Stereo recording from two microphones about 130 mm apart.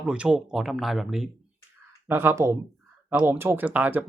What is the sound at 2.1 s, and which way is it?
Speech, 20° right (ahead or behind).